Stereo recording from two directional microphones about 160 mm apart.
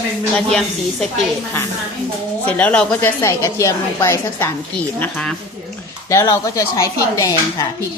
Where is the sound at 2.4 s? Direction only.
10° left (ahead or behind).